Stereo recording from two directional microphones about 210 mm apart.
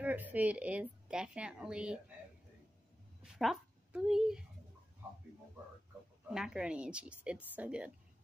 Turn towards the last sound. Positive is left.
turn(degrees=-5)  # may be behind; listen again after turning